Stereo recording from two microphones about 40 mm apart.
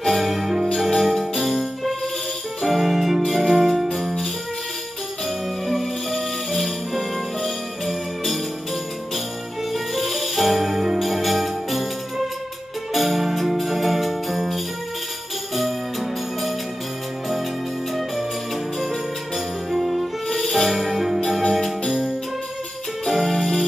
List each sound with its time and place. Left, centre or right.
0.1 s music: centre
3.3 s jingle bell: centre
5.7 s music: centre
9.7 s music: centre
12.9 s jingle bell: centre
15.5 s music: centre
18.8 s music: centre
21.2 s music: centre
23.0 s music: centre